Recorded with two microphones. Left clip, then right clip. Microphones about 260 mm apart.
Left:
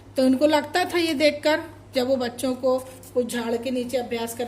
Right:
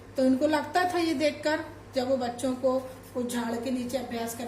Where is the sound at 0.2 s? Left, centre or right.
Left.